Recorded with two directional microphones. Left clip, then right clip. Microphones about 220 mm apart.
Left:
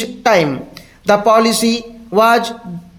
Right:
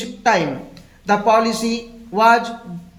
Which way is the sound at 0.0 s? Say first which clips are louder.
Left 4 dB; 50° left (ahead or behind).